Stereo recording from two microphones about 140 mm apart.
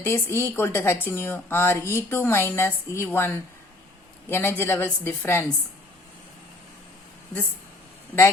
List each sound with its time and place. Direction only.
0.0 s a woman's voice: 15° left (ahead or behind)